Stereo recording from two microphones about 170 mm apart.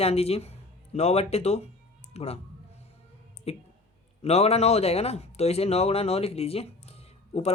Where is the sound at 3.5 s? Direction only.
35° left (ahead or behind).